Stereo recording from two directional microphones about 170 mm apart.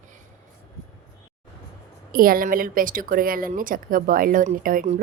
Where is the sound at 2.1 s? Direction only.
55° right (ahead or behind).